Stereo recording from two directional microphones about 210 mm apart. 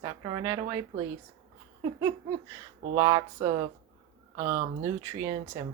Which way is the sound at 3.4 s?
35° right (ahead or behind).